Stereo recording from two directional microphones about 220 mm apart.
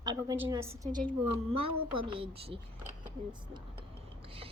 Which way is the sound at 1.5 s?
25° right (ahead or behind).